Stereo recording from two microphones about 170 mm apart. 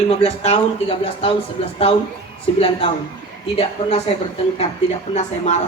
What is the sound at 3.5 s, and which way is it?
Speech, 35° left (ahead or behind).